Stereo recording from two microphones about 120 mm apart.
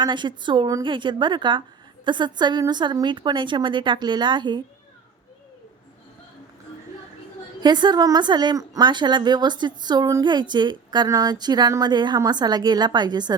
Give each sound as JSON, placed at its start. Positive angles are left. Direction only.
{"t": 0.0, "sound": "a woman's voice", "side_deg": -40}
{"t": 7.6, "sound": "a woman's voice", "side_deg": -35}